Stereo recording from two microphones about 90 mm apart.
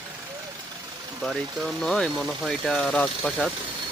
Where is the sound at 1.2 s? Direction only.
5° left (ahead or behind).